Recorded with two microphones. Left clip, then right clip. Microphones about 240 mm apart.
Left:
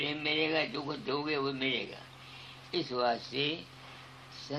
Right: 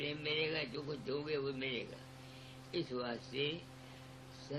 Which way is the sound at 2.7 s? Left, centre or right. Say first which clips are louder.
Left 10 dB; left.